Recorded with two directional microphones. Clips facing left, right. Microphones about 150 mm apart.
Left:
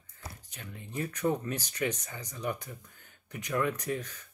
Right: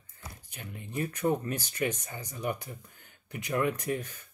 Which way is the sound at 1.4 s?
55° right (ahead or behind).